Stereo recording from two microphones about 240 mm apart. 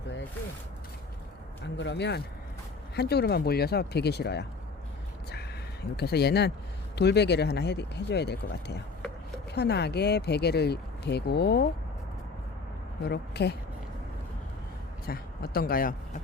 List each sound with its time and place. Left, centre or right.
1.6 s speech: left
6.0 s speech: left
13.0 s speech: left
15.0 s speech: left